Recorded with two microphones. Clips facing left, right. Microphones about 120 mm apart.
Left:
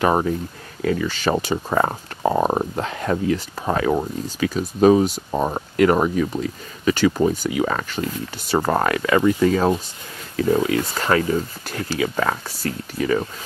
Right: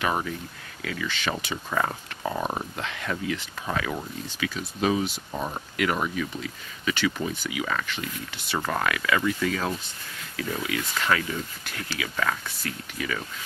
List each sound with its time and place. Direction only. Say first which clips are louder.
0.0 s speech: left 9 dB; 40° left (ahead or behind)